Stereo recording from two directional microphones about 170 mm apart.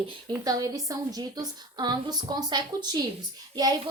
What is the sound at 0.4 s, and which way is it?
A woman's voice, 20° right (ahead or behind).